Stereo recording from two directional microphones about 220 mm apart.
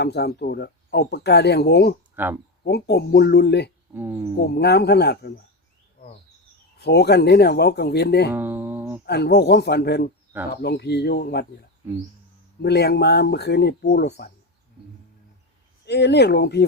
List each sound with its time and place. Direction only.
0.0 s speech: 50° left (ahead or behind)
2.1 s speech: 10° right (ahead or behind)
2.6 s speech: 50° left (ahead or behind)
3.9 s speech: 10° right (ahead or behind)
4.4 s speech: 50° left (ahead or behind)
6.7 s speech: 50° left (ahead or behind)
8.3 s music: 10° right (ahead or behind)
9.0 s speech: 50° left (ahead or behind)
12.6 s speech: 45° left (ahead or behind)
15.9 s speech: 50° left (ahead or behind)